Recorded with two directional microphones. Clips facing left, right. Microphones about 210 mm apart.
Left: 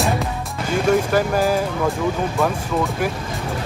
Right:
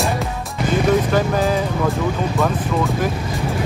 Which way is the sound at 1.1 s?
5° left (ahead or behind).